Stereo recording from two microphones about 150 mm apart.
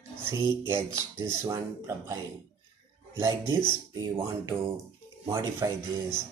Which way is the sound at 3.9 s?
30° right (ahead or behind).